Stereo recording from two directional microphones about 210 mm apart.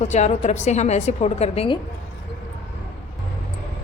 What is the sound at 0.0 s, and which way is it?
A woman's voice, 35° left (ahead or behind).